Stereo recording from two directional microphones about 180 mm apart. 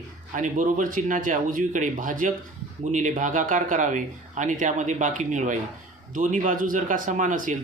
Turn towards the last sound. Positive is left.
turn(degrees=-45)  # may be behind; listen again after turning